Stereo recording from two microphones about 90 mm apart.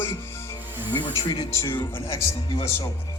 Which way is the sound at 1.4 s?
30° left (ahead or behind).